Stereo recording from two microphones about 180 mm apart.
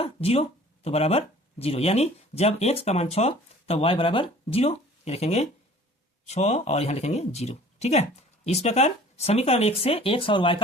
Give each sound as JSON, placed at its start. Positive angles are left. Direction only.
{"t": 0.0, "sound": "speech", "side_deg": 35}